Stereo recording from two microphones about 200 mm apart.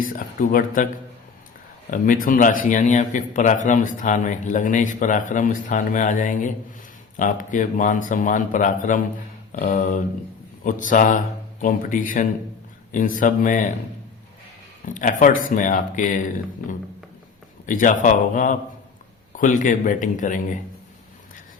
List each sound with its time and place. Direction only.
0.0 s speech: 45° left (ahead or behind)
1.9 s a man's voice: 40° left (ahead or behind)
14.8 s a man's voice: 40° left (ahead or behind)
17.7 s a man's voice: 40° left (ahead or behind)